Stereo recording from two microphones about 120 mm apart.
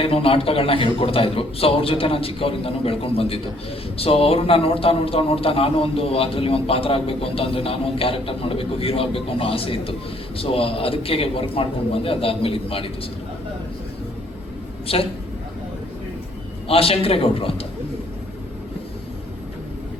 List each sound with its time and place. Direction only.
0.0 s a man's voice: 50° left (ahead or behind)
14.9 s a man's voice: 55° left (ahead or behind)
16.6 s a man's voice: 50° left (ahead or behind)